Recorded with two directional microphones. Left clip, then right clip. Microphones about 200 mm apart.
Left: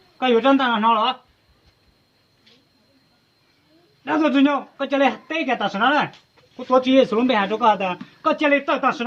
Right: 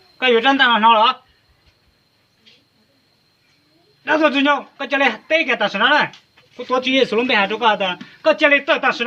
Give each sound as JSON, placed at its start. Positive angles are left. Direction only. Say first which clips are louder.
{"t": 0.2, "sound": "speech", "louder": "right 3 dB", "side_deg": 35}
{"t": 4.0, "sound": "speech", "louder": "right 3 dB", "side_deg": 35}
{"t": 6.7, "sound": "speech", "louder": "left 1 dB", "side_deg": 45}